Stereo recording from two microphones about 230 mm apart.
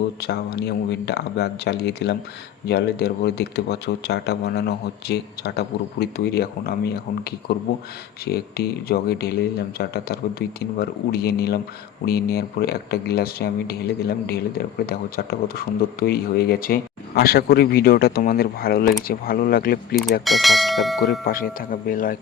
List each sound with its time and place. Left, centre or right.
0.2 s speech: left
14.8 s speech: left
20.2 s speech: centre
21.2 s speech: left